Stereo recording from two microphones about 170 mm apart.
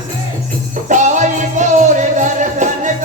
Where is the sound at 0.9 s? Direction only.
45° right (ahead or behind).